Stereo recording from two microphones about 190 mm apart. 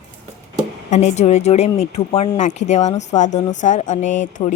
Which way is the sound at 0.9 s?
35° left (ahead or behind).